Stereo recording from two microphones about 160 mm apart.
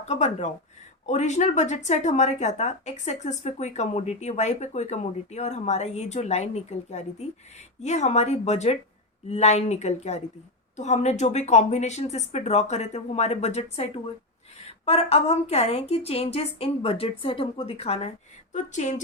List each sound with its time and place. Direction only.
0.1 s a woman's voice: 45° left (ahead or behind)